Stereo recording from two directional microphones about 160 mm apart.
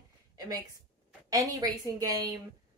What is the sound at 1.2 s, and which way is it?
Speech, 20° right (ahead or behind).